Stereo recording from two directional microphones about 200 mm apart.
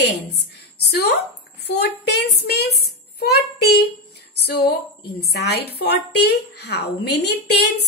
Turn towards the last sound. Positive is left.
turn(degrees=55)  # may be behind; listen again after turning